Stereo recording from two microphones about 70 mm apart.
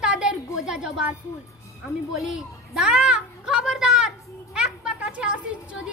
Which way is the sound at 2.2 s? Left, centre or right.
Centre.